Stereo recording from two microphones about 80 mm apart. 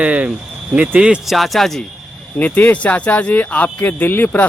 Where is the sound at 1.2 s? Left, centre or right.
Centre.